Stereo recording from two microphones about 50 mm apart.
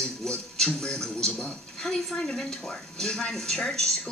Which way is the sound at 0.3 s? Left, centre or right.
Centre.